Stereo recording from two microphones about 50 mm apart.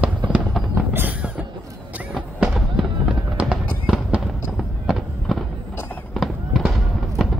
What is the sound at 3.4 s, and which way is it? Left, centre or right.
Fireworks, right.